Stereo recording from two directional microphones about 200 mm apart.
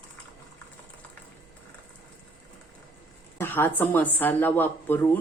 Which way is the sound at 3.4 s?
10° left (ahead or behind).